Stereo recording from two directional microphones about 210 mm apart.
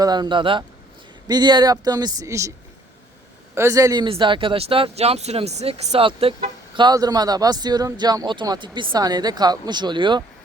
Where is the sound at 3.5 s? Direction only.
15° right (ahead or behind).